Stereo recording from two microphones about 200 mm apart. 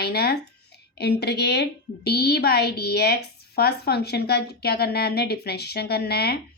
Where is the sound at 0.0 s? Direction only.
55° left (ahead or behind).